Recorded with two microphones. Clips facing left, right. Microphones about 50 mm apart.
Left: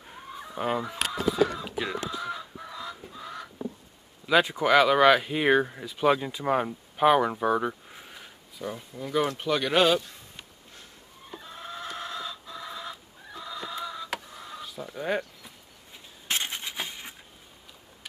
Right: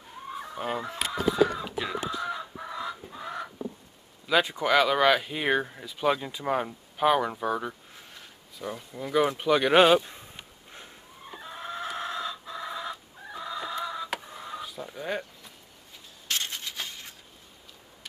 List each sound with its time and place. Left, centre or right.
0.3 s fowl: centre
0.7 s speech: centre
2.1 s chicken: centre
4.3 s speech: centre
8.9 s speech: centre
11.2 s chicken: centre
16.3 s a sound: left